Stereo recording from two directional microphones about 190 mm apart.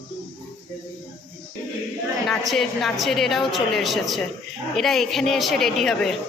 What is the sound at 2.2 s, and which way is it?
A woman's voice, centre (ahead or behind).